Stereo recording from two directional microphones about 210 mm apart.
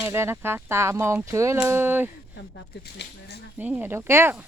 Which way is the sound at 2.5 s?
50° left (ahead or behind).